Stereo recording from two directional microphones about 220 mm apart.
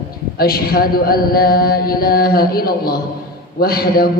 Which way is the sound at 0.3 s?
45° left (ahead or behind).